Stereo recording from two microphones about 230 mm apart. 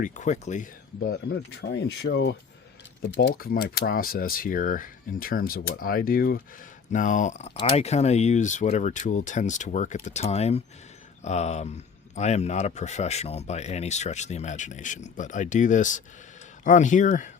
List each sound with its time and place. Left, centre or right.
0.0 s speech: left